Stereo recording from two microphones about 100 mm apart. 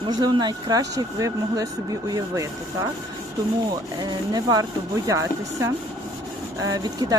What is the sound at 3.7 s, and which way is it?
Speech, 40° right (ahead or behind).